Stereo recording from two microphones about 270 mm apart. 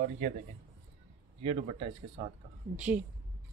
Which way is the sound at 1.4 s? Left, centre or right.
Right.